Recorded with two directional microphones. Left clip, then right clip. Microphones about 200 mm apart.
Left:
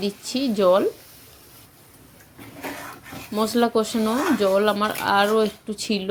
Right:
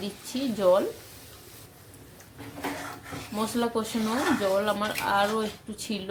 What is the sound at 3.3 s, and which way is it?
Speech, 30° left (ahead or behind).